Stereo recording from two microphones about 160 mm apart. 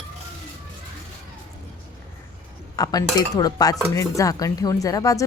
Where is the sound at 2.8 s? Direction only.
25° left (ahead or behind).